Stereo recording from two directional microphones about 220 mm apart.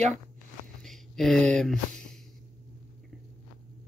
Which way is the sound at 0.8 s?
Centre (ahead or behind).